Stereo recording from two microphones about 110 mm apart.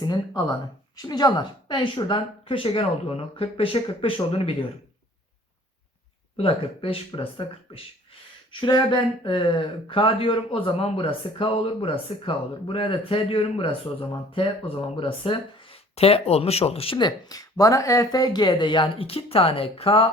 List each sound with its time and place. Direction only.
0.0 s speech: 35° left (ahead or behind); by 4.5 s 60° left (ahead or behind)
6.3 s speech: 60° left (ahead or behind)
17.0 s speech: 35° left (ahead or behind); by 20.1 s 60° left (ahead or behind)